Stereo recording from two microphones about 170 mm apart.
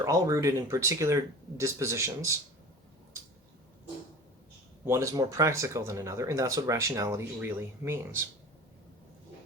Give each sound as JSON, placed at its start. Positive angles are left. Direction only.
{"t": 0.0, "sound": "speech", "side_deg": -20}
{"t": 4.9, "sound": "speech", "side_deg": -20}